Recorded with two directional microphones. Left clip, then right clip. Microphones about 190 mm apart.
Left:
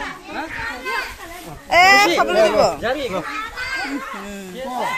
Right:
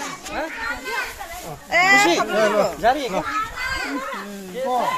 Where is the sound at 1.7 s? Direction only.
35° left (ahead or behind).